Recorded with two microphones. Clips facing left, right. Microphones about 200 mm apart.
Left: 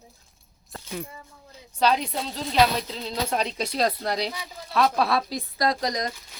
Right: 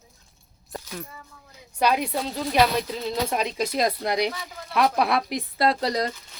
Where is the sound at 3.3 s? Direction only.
10° right (ahead or behind).